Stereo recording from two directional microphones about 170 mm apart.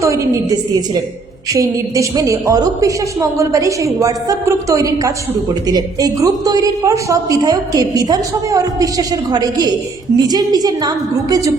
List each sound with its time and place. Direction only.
0.0 s a woman's voice: 20° right (ahead or behind)